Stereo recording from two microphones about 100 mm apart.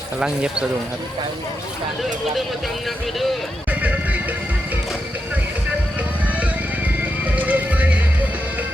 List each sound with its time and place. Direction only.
0.2 s speech: 10° right (ahead or behind)
3.7 s music: 15° right (ahead or behind)
7.0 s music: 15° right (ahead or behind)